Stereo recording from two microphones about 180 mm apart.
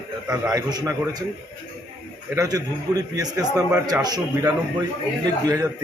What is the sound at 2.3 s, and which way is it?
A man's voice, 20° right (ahead or behind).